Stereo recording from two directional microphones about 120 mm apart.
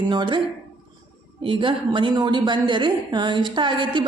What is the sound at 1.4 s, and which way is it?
A woman's voice, 45° right (ahead or behind).